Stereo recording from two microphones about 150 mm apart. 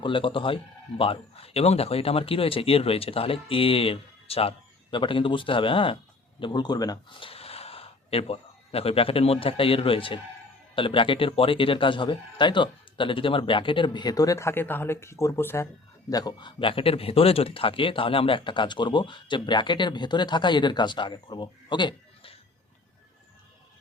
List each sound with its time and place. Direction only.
0.0 s speech: 35° left (ahead or behind)